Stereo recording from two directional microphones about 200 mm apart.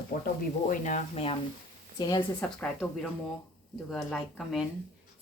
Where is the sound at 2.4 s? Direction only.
5° left (ahead or behind).